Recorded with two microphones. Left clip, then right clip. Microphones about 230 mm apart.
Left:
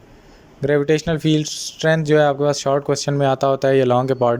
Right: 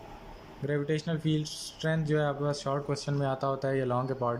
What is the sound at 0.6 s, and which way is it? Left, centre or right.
Speech, left.